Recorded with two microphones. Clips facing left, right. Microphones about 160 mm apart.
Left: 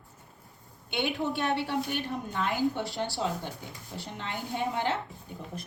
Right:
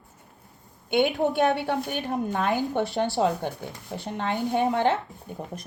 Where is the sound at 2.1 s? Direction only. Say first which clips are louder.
Right 9 dB; 60° right (ahead or behind).